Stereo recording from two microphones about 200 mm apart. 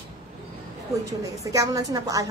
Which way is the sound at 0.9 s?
15° right (ahead or behind).